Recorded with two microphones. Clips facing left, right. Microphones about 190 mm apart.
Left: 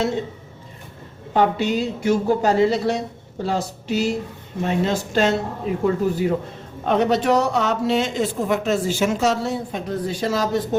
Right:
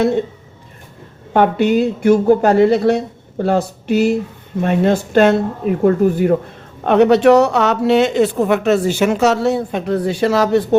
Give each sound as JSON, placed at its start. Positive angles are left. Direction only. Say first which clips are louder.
{"t": 1.3, "sound": "a woman's voice", "louder": "right 6 dB", "side_deg": -60}
{"t": 6.8, "sound": "speech", "louder": "right 8 dB", "side_deg": -65}